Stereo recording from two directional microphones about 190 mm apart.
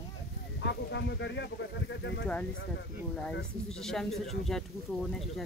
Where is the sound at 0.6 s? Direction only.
65° left (ahead or behind).